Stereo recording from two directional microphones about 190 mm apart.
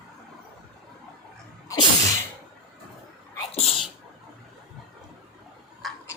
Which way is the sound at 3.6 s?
30° left (ahead or behind).